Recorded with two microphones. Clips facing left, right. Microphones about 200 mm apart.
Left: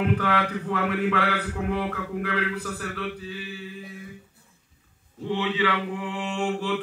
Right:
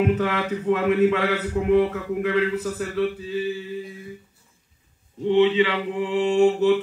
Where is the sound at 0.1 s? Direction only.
20° right (ahead or behind).